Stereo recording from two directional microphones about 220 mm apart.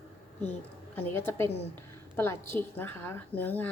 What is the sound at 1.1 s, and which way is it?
A woman's voice, 10° left (ahead or behind).